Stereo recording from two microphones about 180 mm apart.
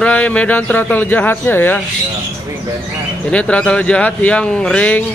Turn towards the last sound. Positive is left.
turn(degrees=5)  # may be behind; listen again after turning